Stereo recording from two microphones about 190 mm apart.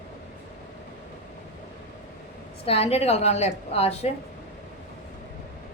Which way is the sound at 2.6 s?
30° left (ahead or behind).